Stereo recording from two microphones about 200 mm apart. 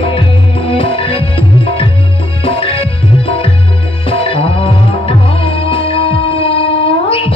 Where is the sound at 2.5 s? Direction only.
25° left (ahead or behind).